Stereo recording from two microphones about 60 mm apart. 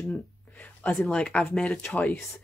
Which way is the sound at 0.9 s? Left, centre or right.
Centre.